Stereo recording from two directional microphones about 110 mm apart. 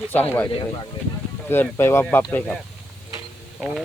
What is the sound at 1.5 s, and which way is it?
Speech, 20° left (ahead or behind).